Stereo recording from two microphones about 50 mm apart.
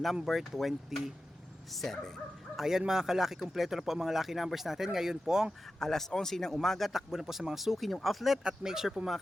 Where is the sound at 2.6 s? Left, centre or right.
Centre.